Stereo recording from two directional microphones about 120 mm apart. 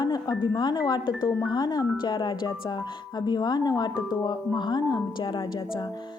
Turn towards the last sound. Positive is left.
turn(degrees=35)  # may be behind; listen again after turning